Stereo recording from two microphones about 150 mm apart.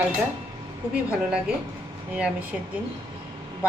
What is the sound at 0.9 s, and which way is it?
Speech, 5° right (ahead or behind).